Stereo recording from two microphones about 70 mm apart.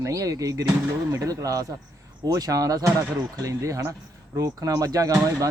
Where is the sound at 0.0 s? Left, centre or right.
Right.